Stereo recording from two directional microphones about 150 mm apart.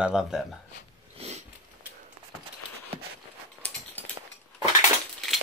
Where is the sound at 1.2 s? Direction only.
40° right (ahead or behind).